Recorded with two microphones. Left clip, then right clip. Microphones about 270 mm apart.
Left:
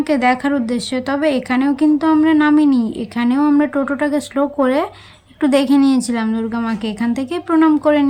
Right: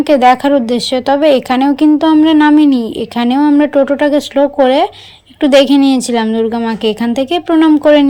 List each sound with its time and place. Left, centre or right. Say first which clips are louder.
0.0 s speech: right 8 dB; centre